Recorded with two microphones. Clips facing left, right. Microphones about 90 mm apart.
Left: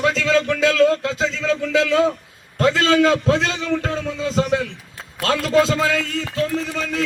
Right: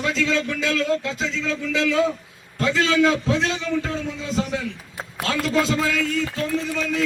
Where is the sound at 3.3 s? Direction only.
40° left (ahead or behind).